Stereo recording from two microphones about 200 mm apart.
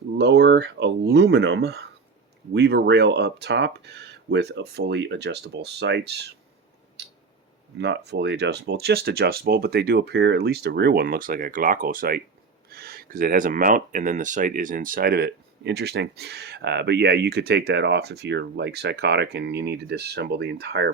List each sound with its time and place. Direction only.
0.2 s speech: 60° right (ahead or behind)
7.0 s a sound: 60° right (ahead or behind)
7.8 s speech: 60° right (ahead or behind)